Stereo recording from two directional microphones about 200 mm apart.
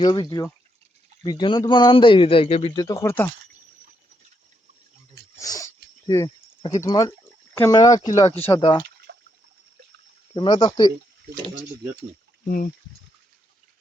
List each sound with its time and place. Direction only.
0.0 s a man's voice: 20° left (ahead or behind)
2.7 s speech: 20° left (ahead or behind)
5.4 s dog: 15° left (ahead or behind)
6.6 s speech: 15° left (ahead or behind)
9.1 s a sound: 60° right (ahead or behind)
10.3 s a man's voice: 20° left (ahead or behind)
12.5 s speech: 45° left (ahead or behind)